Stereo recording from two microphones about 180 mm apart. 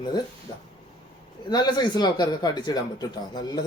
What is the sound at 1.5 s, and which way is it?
Speech, 25° left (ahead or behind).